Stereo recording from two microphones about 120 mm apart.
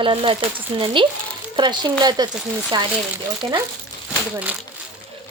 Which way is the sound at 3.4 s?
50° right (ahead or behind).